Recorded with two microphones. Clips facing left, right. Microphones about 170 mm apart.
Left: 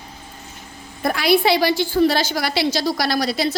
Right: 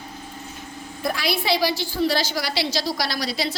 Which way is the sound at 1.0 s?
55° left (ahead or behind).